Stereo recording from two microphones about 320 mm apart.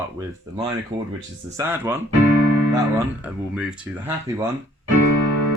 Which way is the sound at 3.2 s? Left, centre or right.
Centre.